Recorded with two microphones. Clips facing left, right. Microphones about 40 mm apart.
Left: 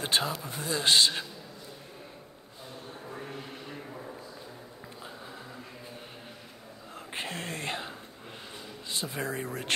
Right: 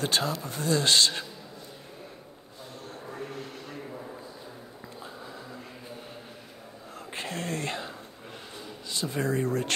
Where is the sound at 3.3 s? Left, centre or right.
Centre.